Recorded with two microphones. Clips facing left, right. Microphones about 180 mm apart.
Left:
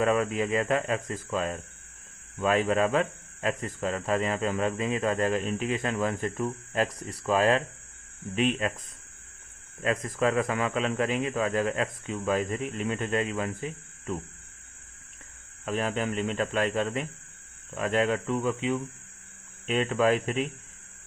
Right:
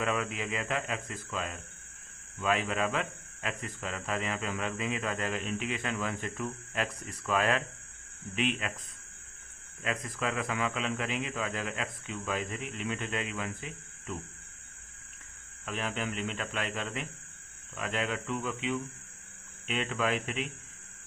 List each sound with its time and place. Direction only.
0.0 s speech: 40° left (ahead or behind)
9.8 s a man's voice: 40° left (ahead or behind)
15.6 s speech: 40° left (ahead or behind)